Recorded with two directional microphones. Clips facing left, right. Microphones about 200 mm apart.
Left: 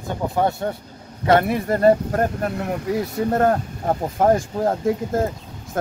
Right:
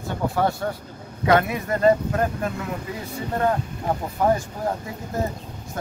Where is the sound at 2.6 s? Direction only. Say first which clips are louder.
Left 8 dB; 60° left (ahead or behind).